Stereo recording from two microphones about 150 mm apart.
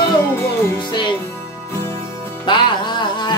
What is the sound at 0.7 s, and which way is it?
Music, 30° left (ahead or behind).